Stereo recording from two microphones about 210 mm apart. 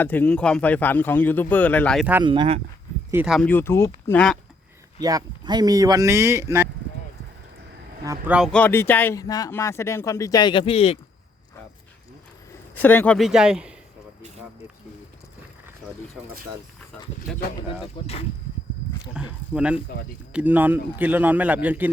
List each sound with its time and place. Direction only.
0.0 s speech: 10° left (ahead or behind)
2.2 s speech: 25° right (ahead or behind)
3.1 s speech: 5° right (ahead or behind)
3.5 s speech: 10° left (ahead or behind)
4.9 s speech: 20° right (ahead or behind)
8.0 s speech: 15° right (ahead or behind)
8.4 s speech: 5° left (ahead or behind); by 10.9 s 25° left (ahead or behind)
12.7 s speech: 10° left (ahead or behind)
17.3 s speech: 5° left (ahead or behind)
17.9 s speech: 30° left (ahead or behind)
19.1 s speech: 5° right (ahead or behind)